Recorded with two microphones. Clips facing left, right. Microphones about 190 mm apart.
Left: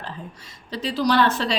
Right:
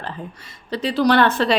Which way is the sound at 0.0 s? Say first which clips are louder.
Right 4 dB; 60° right (ahead or behind).